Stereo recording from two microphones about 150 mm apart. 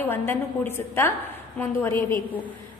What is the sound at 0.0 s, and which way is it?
A woman's voice, 15° left (ahead or behind).